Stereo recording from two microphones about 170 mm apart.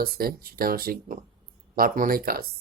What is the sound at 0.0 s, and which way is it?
Speech, 60° right (ahead or behind).